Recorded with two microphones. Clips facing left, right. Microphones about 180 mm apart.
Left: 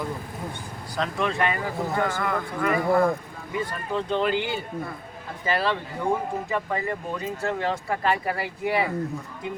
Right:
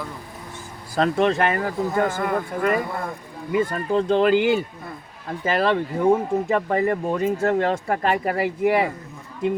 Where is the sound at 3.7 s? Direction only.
45° right (ahead or behind).